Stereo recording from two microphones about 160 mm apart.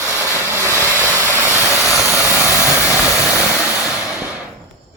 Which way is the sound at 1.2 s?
15° right (ahead or behind).